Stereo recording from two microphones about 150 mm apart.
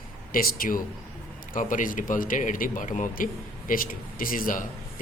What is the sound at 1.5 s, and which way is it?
Speech, 60° left (ahead or behind).